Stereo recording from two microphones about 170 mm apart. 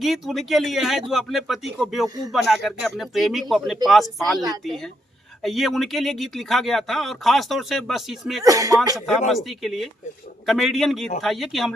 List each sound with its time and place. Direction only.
0.0 s speech: centre (ahead or behind)
8.4 s speech: 20° right (ahead or behind)
9.3 s speech: centre (ahead or behind)